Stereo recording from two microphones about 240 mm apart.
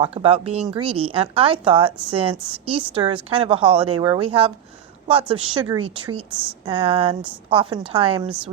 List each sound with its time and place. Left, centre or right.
0.0 s a woman's voice: right
6.3 s speech: centre
6.7 s a woman's voice: right